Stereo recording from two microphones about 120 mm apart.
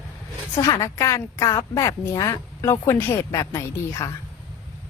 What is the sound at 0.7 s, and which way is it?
A woman's voice, 25° left (ahead or behind).